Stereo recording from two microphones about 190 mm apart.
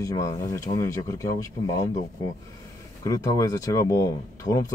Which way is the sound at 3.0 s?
20° left (ahead or behind).